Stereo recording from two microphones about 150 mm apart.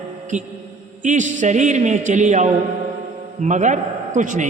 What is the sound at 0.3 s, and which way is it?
A man's voice, 55° right (ahead or behind).